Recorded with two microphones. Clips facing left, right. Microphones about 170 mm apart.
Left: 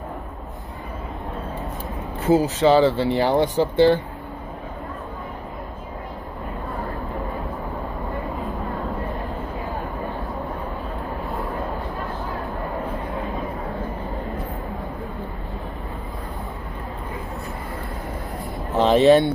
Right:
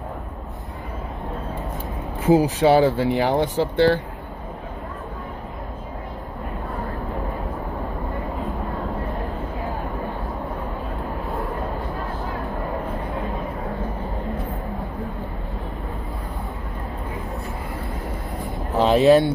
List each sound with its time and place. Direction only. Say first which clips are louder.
2.2 s speech: right 1 dB; 15° right (ahead or behind)
3.5 s speech: left 2 dB; centre (ahead or behind)
18.8 s a sound: even; centre (ahead or behind)